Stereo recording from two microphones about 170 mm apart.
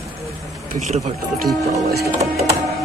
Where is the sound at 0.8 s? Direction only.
40° right (ahead or behind).